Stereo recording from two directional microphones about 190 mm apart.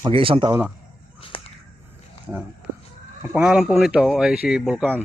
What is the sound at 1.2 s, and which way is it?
Whip, 30° left (ahead or behind).